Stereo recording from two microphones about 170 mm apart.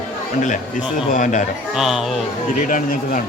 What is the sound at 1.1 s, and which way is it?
Speech, 45° left (ahead or behind).